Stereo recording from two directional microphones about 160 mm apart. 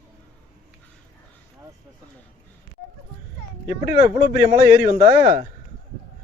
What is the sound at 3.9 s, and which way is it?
Speech, 70° left (ahead or behind).